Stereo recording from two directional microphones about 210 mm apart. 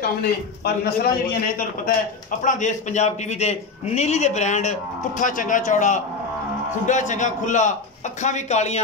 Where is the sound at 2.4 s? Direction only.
35° left (ahead or behind).